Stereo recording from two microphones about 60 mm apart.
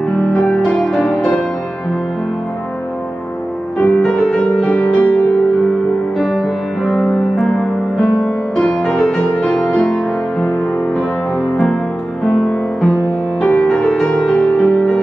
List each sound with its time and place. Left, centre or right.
0.1 s music: left
0.8 s music: centre
3.7 s music: left
6.1 s music: centre
8.5 s music: centre
9.5 s music: centre
9.8 s music: centre
13.4 s music: left